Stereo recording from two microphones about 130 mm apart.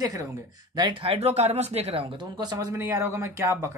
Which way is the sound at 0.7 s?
40° right (ahead or behind).